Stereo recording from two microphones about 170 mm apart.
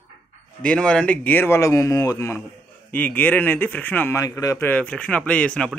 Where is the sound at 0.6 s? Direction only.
5° left (ahead or behind).